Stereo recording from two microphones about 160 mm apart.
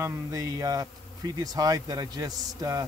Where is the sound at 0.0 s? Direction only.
20° right (ahead or behind).